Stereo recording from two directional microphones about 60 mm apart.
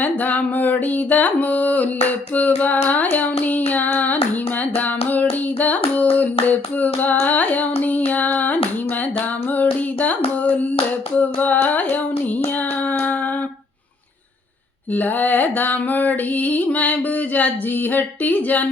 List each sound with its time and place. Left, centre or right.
0.0 s music: left
4.8 s hands: left
9.6 s child singing: left
11.2 s carnatic music: left
12.9 s a sound: left
14.9 s music: left